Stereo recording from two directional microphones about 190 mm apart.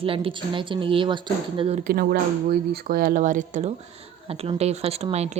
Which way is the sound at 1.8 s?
50° right (ahead or behind).